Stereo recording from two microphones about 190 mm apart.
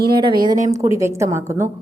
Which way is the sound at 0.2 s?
25° right (ahead or behind).